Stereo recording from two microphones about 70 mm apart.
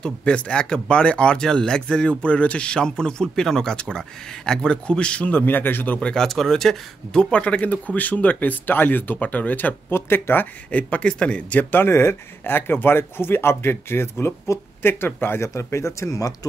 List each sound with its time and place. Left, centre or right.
0.0 s speech: centre
5.9 s speech: centre
11.8 s speech: left